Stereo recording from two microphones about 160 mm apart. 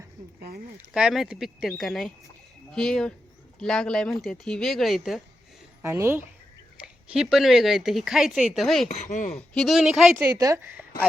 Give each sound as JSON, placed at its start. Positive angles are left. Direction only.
{"t": 0.3, "sound": "speech", "side_deg": -70}
{"t": 0.9, "sound": "speech", "side_deg": -5}
{"t": 5.8, "sound": "a woman's voice", "side_deg": -20}
{"t": 6.8, "sound": "speech", "side_deg": -5}
{"t": 8.9, "sound": "speech", "side_deg": 45}
{"t": 9.6, "sound": "speech", "side_deg": 0}
{"t": 10.3, "sound": "a woman's voice", "side_deg": -20}